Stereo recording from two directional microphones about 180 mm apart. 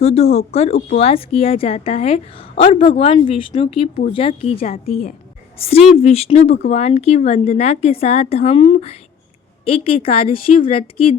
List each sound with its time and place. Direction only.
0.0 s speech: 35° left (ahead or behind)
6.0 s speech: 35° left (ahead or behind)